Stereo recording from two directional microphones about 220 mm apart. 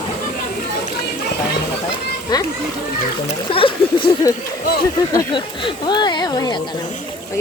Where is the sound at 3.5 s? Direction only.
25° left (ahead or behind).